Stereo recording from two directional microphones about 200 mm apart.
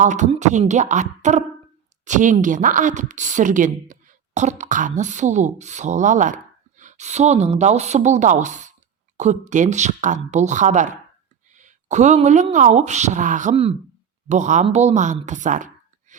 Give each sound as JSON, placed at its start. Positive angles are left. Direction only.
{"t": 0.0, "sound": "speech", "side_deg": -40}